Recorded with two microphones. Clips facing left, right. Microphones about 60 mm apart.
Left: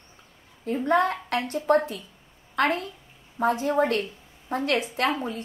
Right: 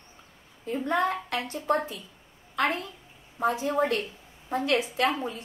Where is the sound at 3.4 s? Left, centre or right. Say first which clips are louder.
Left 3 dB; left.